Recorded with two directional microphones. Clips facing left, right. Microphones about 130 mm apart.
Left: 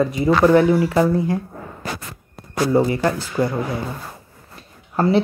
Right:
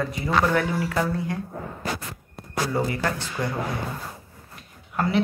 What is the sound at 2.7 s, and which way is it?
Speech, 25° left (ahead or behind).